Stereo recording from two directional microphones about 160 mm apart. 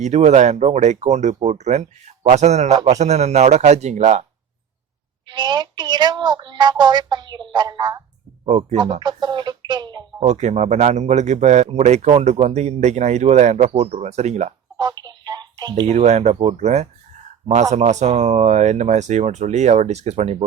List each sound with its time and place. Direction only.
0.0 s speech: 45° right (ahead or behind)
5.3 s a woman's voice: 25° right (ahead or behind)
8.4 s speech: 45° right (ahead or behind)
8.8 s a woman's voice: 30° right (ahead or behind)
10.2 s speech: 45° right (ahead or behind)
14.8 s telephone: 25° right (ahead or behind)
15.9 s speech: 45° right (ahead or behind)